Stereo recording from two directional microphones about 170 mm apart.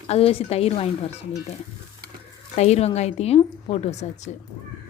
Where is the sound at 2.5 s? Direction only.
40° left (ahead or behind).